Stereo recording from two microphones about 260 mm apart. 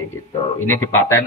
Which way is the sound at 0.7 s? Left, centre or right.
Centre.